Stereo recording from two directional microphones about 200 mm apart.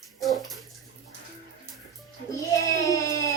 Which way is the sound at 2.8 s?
15° left (ahead or behind).